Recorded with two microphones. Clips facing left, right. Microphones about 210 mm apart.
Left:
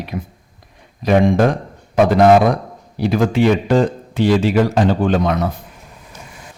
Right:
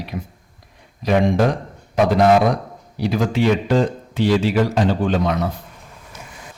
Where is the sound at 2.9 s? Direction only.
50° left (ahead or behind).